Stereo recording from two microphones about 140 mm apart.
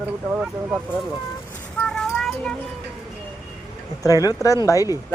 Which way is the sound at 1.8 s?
5° left (ahead or behind).